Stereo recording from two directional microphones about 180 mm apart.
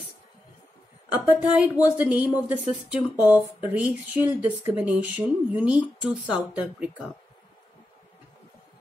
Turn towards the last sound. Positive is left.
turn(degrees=-5)  # may be behind; listen again after turning